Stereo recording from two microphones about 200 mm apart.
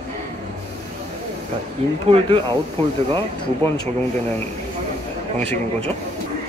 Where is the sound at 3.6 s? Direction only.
20° left (ahead or behind).